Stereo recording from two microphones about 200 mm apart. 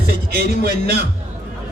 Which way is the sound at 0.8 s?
55° right (ahead or behind).